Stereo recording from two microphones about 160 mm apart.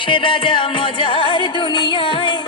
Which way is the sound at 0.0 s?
30° left (ahead or behind).